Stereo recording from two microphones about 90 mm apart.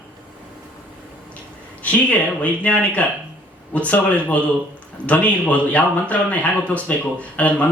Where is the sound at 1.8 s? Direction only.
15° left (ahead or behind).